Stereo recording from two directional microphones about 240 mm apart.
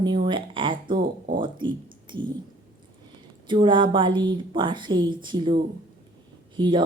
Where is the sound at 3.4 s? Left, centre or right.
Centre.